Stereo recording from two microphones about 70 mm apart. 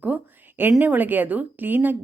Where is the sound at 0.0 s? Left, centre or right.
Right.